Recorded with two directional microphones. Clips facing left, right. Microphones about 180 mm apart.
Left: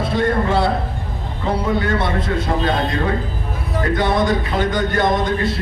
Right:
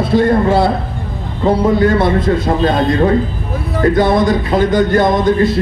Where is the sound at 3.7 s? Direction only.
35° right (ahead or behind).